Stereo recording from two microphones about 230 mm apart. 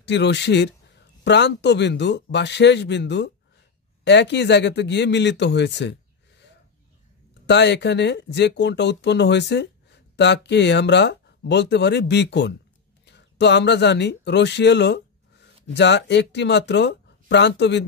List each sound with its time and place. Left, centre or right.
0.0 s speech: left
7.4 s speech: left